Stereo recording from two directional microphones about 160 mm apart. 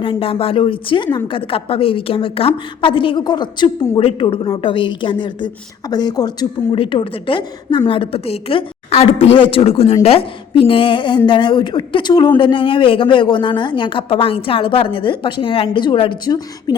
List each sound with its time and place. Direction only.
0.0 s a woman's voice: 35° left (ahead or behind)